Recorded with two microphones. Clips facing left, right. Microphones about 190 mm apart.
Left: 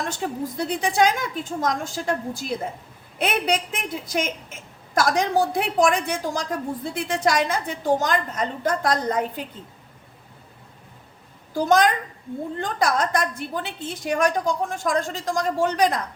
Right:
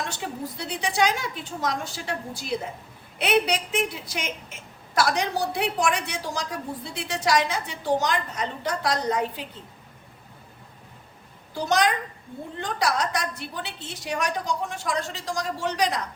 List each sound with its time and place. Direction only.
0.1 s a woman's voice: 50° left (ahead or behind)
11.5 s a woman's voice: 50° left (ahead or behind)